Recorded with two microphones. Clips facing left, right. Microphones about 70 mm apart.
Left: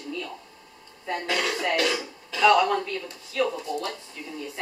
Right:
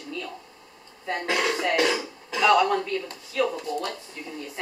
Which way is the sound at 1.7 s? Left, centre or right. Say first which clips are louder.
Right 2 dB; right.